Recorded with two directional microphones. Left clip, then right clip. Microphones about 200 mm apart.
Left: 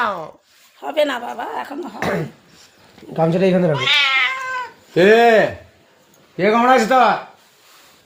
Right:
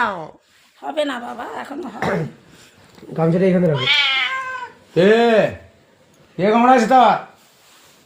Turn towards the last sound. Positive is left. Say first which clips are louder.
# right 1 dB
turn(degrees=15)  # may be behind; listen again after turning